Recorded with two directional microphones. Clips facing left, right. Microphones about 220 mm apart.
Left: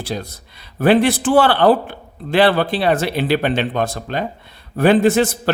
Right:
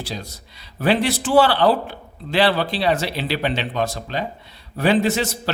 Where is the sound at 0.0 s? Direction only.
55° left (ahead or behind).